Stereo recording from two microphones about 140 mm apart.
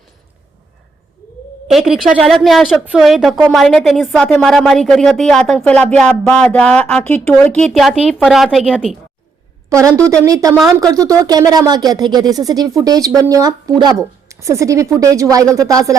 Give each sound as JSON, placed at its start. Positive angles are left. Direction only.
{"t": 1.6, "sound": "a woman's voice", "side_deg": -5}
{"t": 9.6, "sound": "a woman's voice", "side_deg": -20}